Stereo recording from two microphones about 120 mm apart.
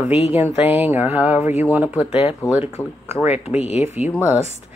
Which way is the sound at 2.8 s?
25° left (ahead or behind).